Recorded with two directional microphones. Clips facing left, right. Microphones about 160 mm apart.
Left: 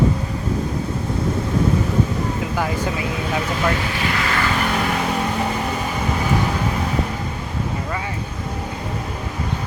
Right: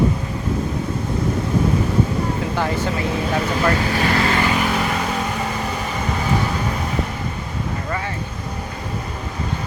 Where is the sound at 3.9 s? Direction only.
35° right (ahead or behind).